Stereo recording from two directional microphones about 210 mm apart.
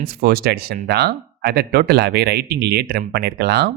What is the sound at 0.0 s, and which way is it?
Speech, 45° right (ahead or behind).